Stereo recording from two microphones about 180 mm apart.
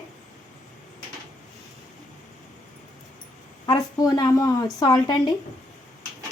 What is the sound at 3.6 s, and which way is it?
A woman's voice, 20° left (ahead or behind).